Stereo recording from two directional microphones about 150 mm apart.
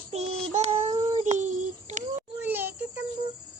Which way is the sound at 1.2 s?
50° right (ahead or behind).